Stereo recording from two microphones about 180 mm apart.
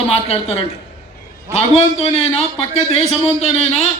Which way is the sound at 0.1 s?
35° left (ahead or behind).